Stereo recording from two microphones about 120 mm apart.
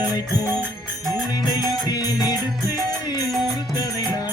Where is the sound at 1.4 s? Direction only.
35° left (ahead or behind).